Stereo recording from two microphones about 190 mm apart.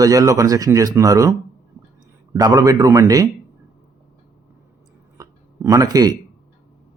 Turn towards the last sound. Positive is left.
turn(degrees=-20)  # may be behind; listen again after turning